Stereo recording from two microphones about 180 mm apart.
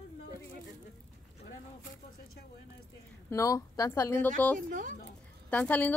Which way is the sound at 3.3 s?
20° left (ahead or behind).